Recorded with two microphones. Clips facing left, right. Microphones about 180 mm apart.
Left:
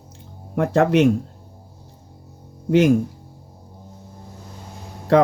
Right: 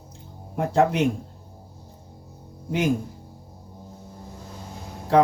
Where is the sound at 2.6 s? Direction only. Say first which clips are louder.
Left 8 dB; 75° left (ahead or behind).